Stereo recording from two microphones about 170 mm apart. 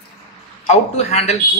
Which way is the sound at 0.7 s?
40° left (ahead or behind).